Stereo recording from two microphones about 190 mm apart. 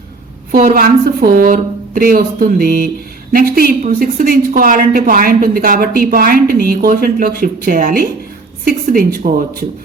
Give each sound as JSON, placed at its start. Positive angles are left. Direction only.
{"t": 0.5, "sound": "a woman's voice", "side_deg": -50}